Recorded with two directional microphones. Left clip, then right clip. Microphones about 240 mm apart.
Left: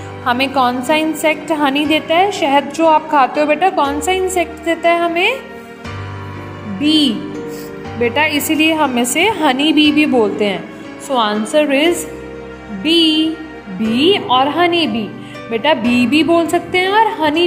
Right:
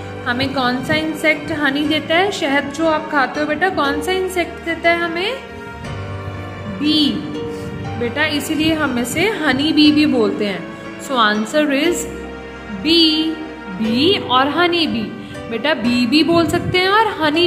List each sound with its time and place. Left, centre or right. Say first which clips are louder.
0.2 s a woman's voice: left 5 dB; centre
6.8 s a woman's voice: left 3 dB; centre
8.5 s a woman's voice: left 4 dB; centre